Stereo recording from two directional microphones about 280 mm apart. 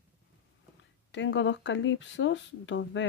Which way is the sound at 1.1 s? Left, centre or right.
Left.